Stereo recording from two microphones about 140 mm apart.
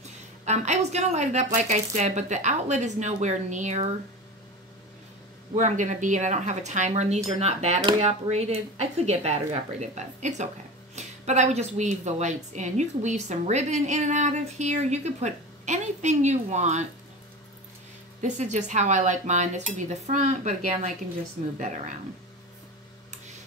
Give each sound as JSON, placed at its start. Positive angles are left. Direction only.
{"t": 0.5, "sound": "a woman's voice", "side_deg": -55}
{"t": 5.5, "sound": "a woman's voice", "side_deg": -60}
{"t": 18.2, "sound": "a woman's voice", "side_deg": -55}